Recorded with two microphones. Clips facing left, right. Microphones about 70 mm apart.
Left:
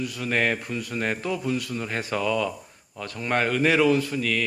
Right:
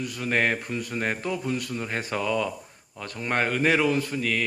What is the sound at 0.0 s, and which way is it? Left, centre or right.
A man's voice, right.